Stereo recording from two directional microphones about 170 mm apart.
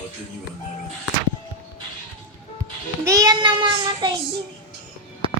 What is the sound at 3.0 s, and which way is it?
Child singing, 20° right (ahead or behind).